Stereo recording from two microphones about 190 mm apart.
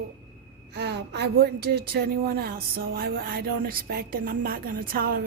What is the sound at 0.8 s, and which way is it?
A woman's voice, 60° right (ahead or behind).